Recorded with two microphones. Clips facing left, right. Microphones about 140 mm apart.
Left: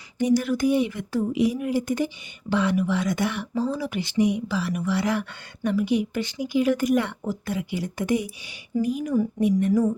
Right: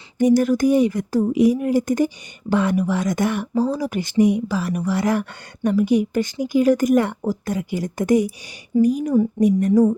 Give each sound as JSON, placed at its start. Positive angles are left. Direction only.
{"t": 0.2, "sound": "speech", "side_deg": -45}